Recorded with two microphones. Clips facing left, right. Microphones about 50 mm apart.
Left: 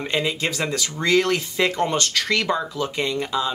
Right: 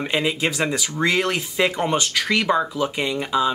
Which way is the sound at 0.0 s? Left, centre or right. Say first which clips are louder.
Right 2 dB; centre.